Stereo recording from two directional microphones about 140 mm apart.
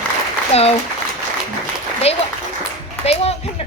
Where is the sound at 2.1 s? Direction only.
45° left (ahead or behind).